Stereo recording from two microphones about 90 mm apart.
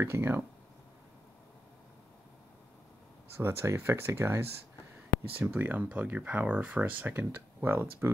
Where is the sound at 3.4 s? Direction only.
30° right (ahead or behind).